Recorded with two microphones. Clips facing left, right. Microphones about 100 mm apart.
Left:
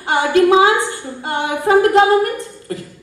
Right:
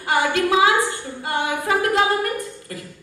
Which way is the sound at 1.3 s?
30° left (ahead or behind).